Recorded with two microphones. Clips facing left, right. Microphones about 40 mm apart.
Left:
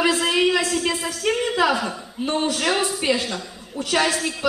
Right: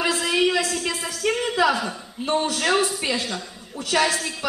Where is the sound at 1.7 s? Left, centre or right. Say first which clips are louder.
Left 1 dB; centre.